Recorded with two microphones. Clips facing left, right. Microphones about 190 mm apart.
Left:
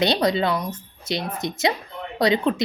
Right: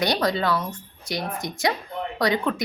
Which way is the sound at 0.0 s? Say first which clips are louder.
Left 3 dB; 20° left (ahead or behind).